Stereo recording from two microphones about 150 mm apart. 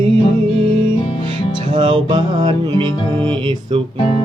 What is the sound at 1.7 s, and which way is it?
Music, 35° right (ahead or behind).